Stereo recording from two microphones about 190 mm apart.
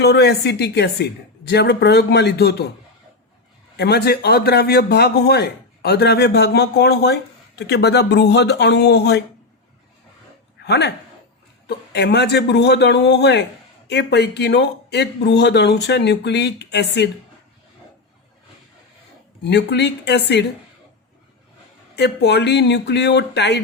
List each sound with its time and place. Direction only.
0.0 s a man's voice: 60° left (ahead or behind)
3.8 s a man's voice: 55° left (ahead or behind)
10.7 s a man's voice: 60° left (ahead or behind)
11.9 s a man's voice: 60° left (ahead or behind)
19.5 s a man's voice: 65° left (ahead or behind)
21.9 s a man's voice: 60° left (ahead or behind)